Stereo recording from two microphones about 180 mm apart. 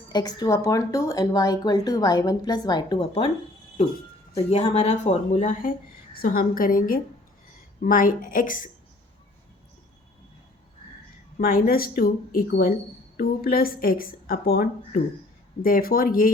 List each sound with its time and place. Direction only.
0.1 s speech: 25° left (ahead or behind)
4.4 s a woman's voice: 35° left (ahead or behind)
11.3 s a woman's voice: 55° left (ahead or behind)